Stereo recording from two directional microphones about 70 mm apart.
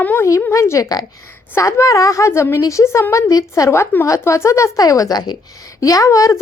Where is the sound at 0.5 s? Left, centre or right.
Left.